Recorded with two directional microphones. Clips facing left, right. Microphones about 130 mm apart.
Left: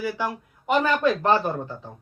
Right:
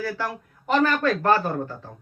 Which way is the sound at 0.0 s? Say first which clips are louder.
Left 1 dB; 15° left (ahead or behind).